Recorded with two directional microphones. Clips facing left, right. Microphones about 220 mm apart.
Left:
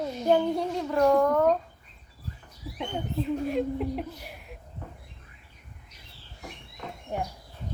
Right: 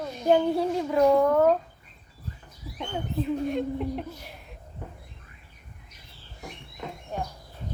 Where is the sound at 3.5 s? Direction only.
Centre (ahead or behind).